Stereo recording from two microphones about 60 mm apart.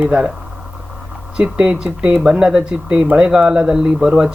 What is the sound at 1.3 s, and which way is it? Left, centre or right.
Speech, centre.